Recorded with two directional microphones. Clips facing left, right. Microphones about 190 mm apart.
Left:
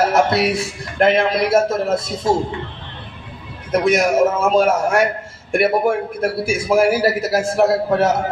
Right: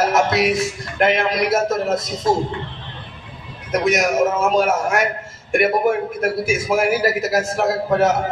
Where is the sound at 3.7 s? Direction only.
30° left (ahead or behind).